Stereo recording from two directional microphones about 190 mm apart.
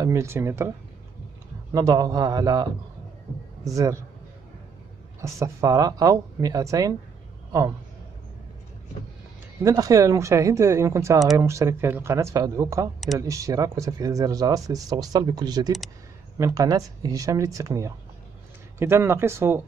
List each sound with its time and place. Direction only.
0.0 s speech: 15° right (ahead or behind)
1.7 s speech: 20° right (ahead or behind)
3.6 s speech: 15° right (ahead or behind)
5.2 s speech: 15° right (ahead or behind)
9.6 s speech: 15° right (ahead or behind)